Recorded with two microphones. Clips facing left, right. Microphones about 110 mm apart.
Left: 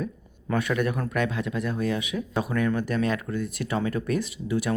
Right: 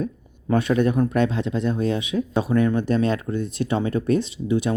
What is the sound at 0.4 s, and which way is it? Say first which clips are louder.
Speech: right 6 dB; 25° right (ahead or behind).